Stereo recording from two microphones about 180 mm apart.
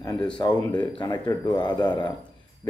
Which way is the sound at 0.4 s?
25° left (ahead or behind).